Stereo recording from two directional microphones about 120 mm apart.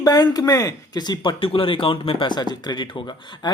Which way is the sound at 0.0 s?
30° left (ahead or behind).